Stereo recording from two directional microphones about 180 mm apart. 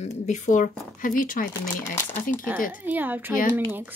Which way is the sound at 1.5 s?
15° left (ahead or behind).